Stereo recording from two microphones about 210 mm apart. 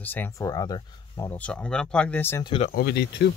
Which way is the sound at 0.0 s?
10° left (ahead or behind).